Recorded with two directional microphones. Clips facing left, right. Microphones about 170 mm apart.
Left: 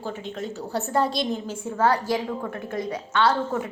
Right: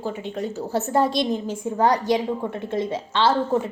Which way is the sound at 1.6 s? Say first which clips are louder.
Right 2 dB; 15° right (ahead or behind).